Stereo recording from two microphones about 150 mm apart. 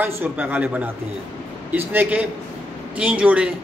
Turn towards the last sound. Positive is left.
turn(degrees=-10)  # may be behind; listen again after turning